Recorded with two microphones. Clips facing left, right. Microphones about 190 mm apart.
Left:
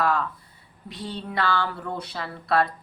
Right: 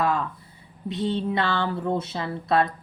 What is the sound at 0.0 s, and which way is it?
A woman's voice, 20° right (ahead or behind).